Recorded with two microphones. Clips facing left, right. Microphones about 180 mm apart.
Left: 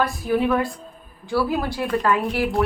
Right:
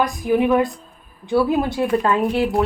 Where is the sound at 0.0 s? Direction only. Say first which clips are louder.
Right 3 dB; 15° right (ahead or behind).